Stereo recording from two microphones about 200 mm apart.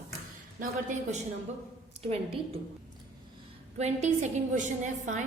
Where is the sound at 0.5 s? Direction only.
35° right (ahead or behind).